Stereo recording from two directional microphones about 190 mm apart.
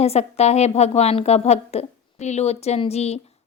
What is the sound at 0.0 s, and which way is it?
A woman's voice, 35° left (ahead or behind).